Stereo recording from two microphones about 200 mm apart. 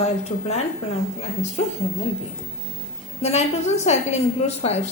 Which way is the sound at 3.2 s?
30° left (ahead or behind).